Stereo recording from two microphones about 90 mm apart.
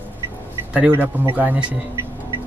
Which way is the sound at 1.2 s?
20° right (ahead or behind).